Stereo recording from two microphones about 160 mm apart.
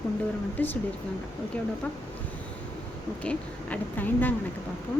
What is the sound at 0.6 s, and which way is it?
Speech, 10° left (ahead or behind).